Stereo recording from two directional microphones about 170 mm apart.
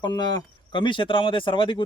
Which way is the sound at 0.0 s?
25° left (ahead or behind).